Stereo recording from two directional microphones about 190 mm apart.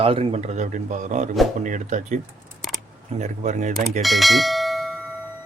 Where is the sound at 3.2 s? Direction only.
40° right (ahead or behind).